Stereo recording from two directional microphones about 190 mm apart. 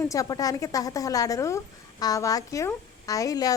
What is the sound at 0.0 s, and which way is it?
A woman's voice, 15° left (ahead or behind).